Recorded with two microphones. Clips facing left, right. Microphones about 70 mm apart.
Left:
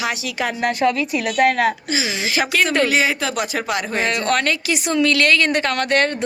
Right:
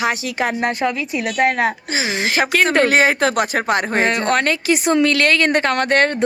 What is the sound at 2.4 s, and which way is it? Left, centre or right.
Speech, right.